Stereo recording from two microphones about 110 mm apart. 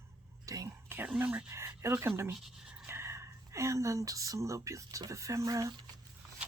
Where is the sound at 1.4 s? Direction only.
25° right (ahead or behind).